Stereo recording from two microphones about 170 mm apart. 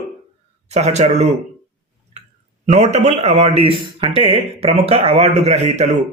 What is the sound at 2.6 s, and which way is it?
Speech, 40° right (ahead or behind).